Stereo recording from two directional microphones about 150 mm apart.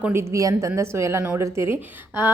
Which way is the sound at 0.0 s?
15° right (ahead or behind).